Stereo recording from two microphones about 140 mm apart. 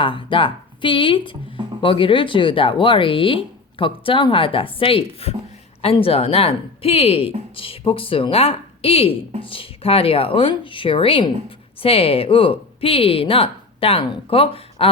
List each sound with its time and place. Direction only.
0.0 s speech: 35° left (ahead or behind)